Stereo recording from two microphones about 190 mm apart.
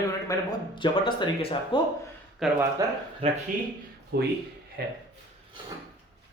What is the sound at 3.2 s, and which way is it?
Speech, 30° right (ahead or behind).